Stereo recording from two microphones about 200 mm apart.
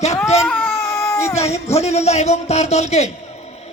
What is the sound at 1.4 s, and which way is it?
A man's voice, 30° left (ahead or behind).